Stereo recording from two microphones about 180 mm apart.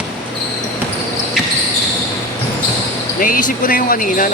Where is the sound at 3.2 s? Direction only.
50° left (ahead or behind).